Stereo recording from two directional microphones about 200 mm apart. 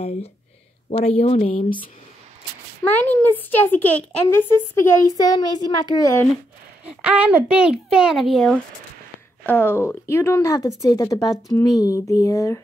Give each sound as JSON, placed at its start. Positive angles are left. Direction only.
{"t": 0.8, "sound": "speech", "side_deg": 30}
{"t": 2.8, "sound": "a woman's voice", "side_deg": 10}
{"t": 6.9, "sound": "a woman's voice", "side_deg": -5}